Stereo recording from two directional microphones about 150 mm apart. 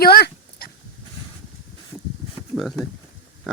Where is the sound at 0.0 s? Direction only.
90° left.